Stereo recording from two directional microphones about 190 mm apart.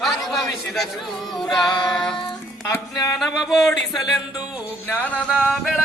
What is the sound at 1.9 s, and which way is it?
Music, 5° left (ahead or behind).